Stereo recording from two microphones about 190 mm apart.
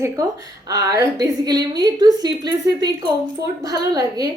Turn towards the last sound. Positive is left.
turn(degrees=-20)  # may be behind; listen again after turning